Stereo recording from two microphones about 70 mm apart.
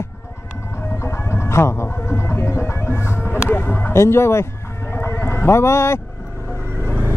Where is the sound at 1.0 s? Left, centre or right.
Left.